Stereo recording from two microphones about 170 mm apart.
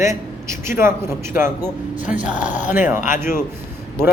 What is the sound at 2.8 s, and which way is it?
Speech, 10° right (ahead or behind).